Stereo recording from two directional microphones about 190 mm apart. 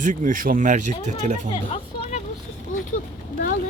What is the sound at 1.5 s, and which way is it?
Speech, 30° left (ahead or behind).